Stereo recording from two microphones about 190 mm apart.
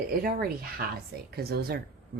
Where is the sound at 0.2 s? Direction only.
50° right (ahead or behind).